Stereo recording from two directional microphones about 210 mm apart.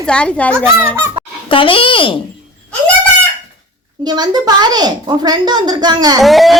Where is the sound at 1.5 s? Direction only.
25° left (ahead or behind).